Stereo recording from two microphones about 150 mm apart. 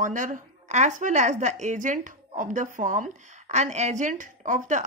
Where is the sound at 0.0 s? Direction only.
60° right (ahead or behind).